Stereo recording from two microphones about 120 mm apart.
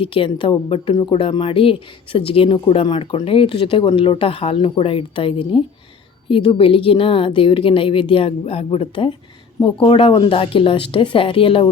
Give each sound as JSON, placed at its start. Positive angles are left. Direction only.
{"t": 0.0, "sound": "speech", "side_deg": 50}